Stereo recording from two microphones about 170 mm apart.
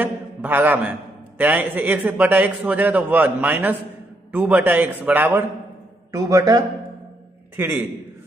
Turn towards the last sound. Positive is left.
turn(degrees=-10)  # may be behind; listen again after turning